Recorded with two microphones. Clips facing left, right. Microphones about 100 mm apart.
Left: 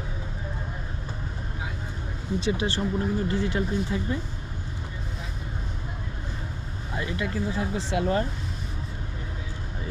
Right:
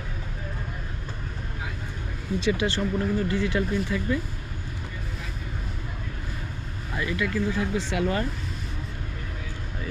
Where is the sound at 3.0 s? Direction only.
20° left (ahead or behind).